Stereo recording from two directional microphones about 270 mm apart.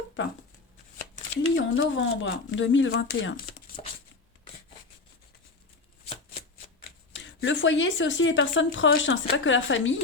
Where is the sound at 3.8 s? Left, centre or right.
Left.